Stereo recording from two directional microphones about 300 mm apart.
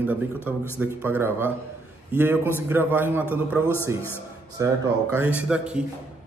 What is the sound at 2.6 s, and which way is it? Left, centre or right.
A man's voice, centre.